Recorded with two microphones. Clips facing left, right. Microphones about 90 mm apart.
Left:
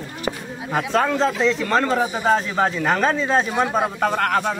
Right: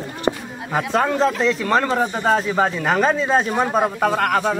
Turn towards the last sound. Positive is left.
turn(degrees=-5)  # may be behind; listen again after turning